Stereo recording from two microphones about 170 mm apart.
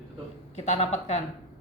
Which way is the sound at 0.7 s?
40° left (ahead or behind).